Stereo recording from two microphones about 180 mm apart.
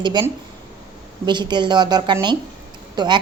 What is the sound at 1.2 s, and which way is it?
Speech, 25° right (ahead or behind).